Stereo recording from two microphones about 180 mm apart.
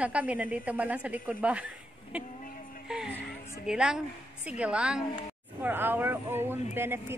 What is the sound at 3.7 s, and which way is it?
A woman's voice, 5° right (ahead or behind).